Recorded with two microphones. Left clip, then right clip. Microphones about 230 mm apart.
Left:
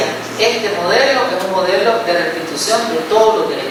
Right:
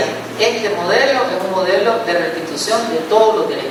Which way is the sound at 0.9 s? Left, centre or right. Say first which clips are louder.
Left 1 dB; centre.